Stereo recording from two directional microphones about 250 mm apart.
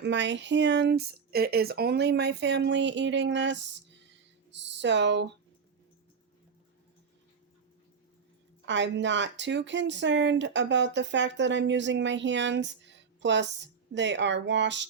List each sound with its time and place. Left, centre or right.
0.0 s speech: right
4.0 s a sound: right
8.6 s speech: right